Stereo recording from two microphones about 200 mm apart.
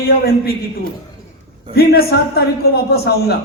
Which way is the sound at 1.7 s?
50° left (ahead or behind).